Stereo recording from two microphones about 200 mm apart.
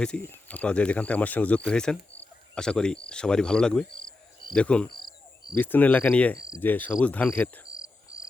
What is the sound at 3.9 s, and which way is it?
Cricket, 25° left (ahead or behind).